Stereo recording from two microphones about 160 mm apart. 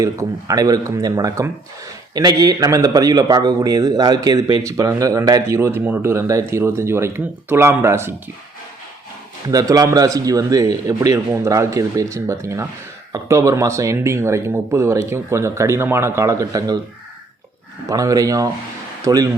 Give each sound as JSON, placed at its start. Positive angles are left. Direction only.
{"t": 0.0, "sound": "speech", "side_deg": -20}
{"t": 9.5, "sound": "speech", "side_deg": -20}
{"t": 17.8, "sound": "speech", "side_deg": -20}